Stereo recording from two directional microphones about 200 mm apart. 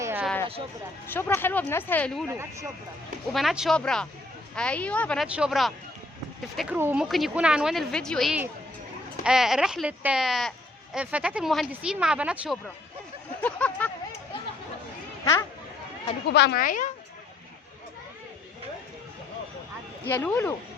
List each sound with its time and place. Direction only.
0.0 s a sound: 10° right (ahead or behind)
1.0 s speech: 10° left (ahead or behind)
2.3 s speech: 15° right (ahead or behind)
3.3 s speech: centre (ahead or behind)
13.4 s a sound: 5° left (ahead or behind)
15.2 s speech: 15° left (ahead or behind)
16.3 s speech: 55° left (ahead or behind)
20.1 s speech: 10° left (ahead or behind)